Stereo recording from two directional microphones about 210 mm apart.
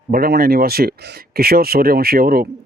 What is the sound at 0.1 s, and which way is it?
Speech, 45° right (ahead or behind).